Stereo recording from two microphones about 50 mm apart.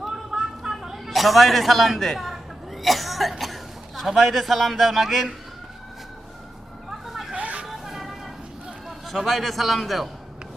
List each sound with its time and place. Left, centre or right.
0.0 s a sound: centre
2.8 s speech: centre
7.1 s vehicle: centre
7.3 s vehicle: right
7.6 s vehicle: centre
9.0 s a man's voice: centre